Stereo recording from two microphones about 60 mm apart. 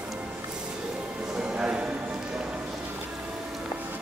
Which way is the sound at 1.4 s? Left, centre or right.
Centre.